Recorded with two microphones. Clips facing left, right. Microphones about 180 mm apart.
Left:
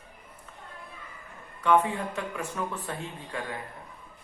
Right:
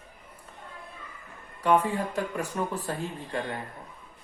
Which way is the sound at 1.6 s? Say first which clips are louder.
Even; 35° right (ahead or behind).